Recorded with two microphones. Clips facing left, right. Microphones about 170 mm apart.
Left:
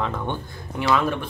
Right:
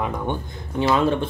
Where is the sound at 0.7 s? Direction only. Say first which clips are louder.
Right 3 dB; 25° right (ahead or behind).